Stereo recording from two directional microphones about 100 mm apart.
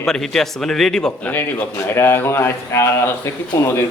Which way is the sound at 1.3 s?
20° left (ahead or behind).